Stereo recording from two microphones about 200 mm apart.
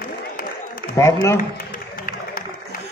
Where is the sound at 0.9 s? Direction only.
15° left (ahead or behind).